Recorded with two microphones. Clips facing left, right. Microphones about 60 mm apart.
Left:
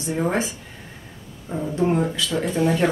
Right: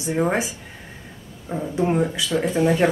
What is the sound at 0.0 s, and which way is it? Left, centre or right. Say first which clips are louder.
Speech: right 1 dB; centre.